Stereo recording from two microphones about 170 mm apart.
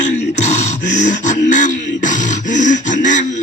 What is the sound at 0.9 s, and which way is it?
Beatboxing, 45° left (ahead or behind).